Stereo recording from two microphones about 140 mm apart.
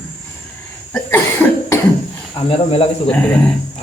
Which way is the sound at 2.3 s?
45° left (ahead or behind).